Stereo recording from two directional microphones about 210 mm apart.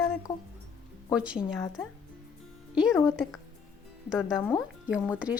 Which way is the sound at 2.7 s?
Centre (ahead or behind).